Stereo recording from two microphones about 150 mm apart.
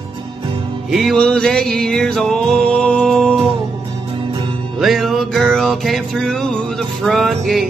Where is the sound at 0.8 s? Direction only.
Centre (ahead or behind).